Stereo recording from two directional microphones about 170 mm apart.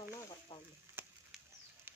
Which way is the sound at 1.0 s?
15° right (ahead or behind).